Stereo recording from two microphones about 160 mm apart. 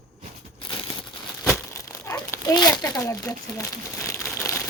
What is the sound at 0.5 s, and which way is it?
Crumpling, 30° left (ahead or behind).